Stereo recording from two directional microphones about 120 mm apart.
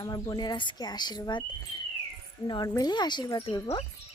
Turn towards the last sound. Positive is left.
turn(degrees=50)  # may be behind; listen again after turning